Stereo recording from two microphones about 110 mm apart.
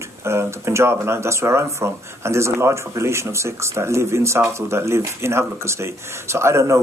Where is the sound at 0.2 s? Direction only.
25° right (ahead or behind).